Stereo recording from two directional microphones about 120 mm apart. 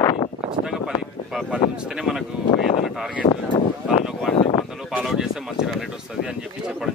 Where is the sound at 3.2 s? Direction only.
55° left (ahead or behind).